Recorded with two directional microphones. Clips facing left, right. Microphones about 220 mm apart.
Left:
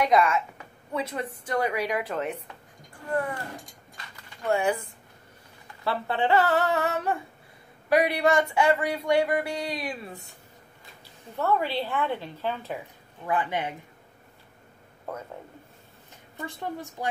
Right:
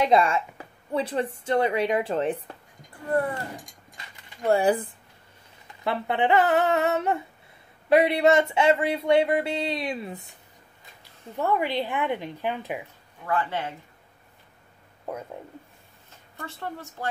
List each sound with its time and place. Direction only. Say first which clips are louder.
0.0 s speech: right 1 dB; 30° right (ahead or behind)
3.5 s a sound: even; 20° right (ahead or behind)
4.5 s speech: right 4 dB; 35° right (ahead or behind)
5.9 s speech: right 2 dB; 20° right (ahead or behind)
11.3 s a woman's voice: right 1 dB; 15° right (ahead or behind)
13.2 s a woman's voice: even; 15° left (ahead or behind)
15.1 s a woman's voice: right 2 dB; 15° right (ahead or behind)
16.3 s a woman's voice: left 2 dB; 15° left (ahead or behind)